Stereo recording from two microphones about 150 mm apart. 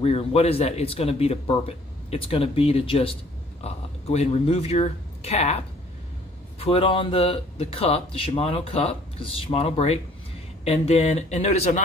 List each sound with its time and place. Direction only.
0.0 s speech: 40° left (ahead or behind)
6.6 s speech: 40° left (ahead or behind)